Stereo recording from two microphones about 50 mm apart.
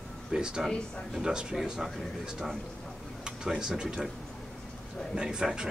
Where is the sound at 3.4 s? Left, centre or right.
Centre.